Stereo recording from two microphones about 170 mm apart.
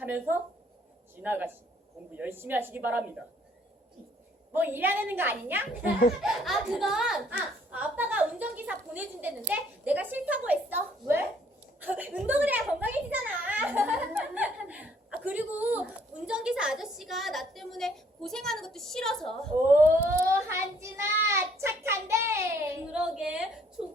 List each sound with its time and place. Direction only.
0.0 s a child's voice: 10° right (ahead or behind)
4.5 s a child's voice: 10° right (ahead or behind)
6.4 s a child's voice: centre (ahead or behind)
20.1 s a child's voice: 15° right (ahead or behind)